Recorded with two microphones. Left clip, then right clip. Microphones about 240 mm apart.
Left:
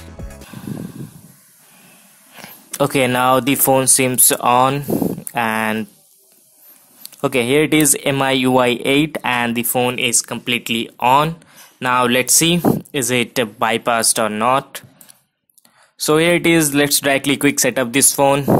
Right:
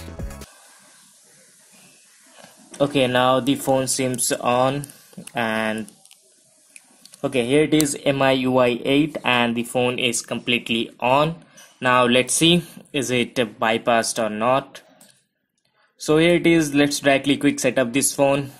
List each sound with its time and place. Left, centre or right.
0.0 s music: centre
2.3 s speech: left
7.2 s speech: left
16.0 s speech: left